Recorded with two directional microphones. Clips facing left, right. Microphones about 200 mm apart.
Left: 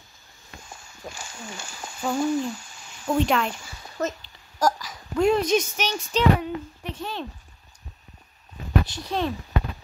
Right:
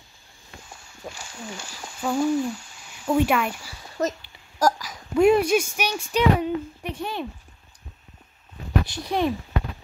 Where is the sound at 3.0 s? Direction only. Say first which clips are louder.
Right 1 dB; 5° right (ahead or behind).